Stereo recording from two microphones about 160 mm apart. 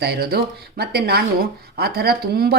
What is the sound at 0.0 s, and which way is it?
Speech, 85° right.